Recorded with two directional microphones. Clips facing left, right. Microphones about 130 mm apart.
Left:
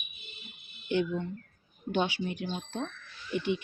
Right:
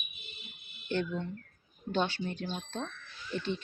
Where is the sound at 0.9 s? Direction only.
15° left (ahead or behind).